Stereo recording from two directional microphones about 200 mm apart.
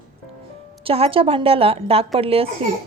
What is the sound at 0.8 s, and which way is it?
A woman's voice, 30° right (ahead or behind).